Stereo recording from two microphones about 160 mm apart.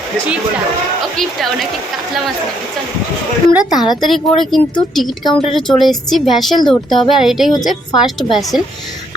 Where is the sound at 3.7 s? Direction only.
25° left (ahead or behind).